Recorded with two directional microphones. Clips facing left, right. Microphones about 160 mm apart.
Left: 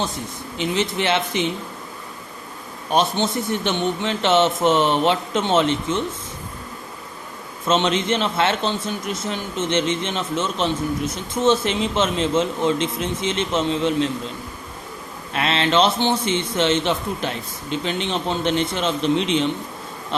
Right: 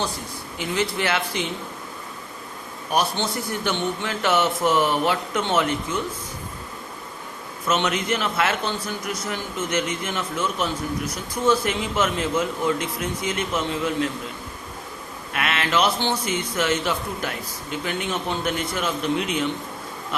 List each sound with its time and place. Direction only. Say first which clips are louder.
0.5 s a man's voice: left 3 dB; 20° left (ahead or behind)
2.9 s a man's voice: left 4 dB; 25° left (ahead or behind)
7.7 s a man's voice: left 4 dB; 25° left (ahead or behind)
15.3 s a man's voice: left 4 dB; 30° left (ahead or behind)